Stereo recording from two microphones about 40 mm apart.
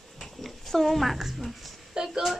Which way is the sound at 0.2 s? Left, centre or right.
Centre.